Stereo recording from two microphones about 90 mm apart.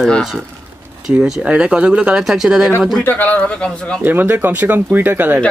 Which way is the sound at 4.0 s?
20° right (ahead or behind).